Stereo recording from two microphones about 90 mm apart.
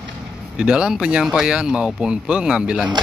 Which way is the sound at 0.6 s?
10° right (ahead or behind).